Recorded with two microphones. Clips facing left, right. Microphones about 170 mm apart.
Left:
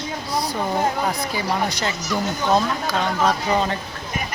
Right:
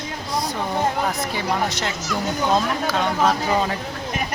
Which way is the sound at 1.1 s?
Centre (ahead or behind).